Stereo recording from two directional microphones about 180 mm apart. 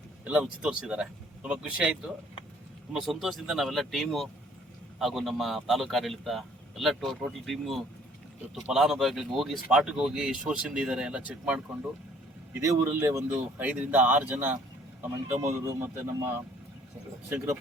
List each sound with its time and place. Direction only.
0.3 s a man's voice: 5° right (ahead or behind)